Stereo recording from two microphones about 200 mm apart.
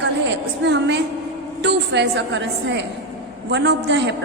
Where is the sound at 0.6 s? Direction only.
60° right (ahead or behind).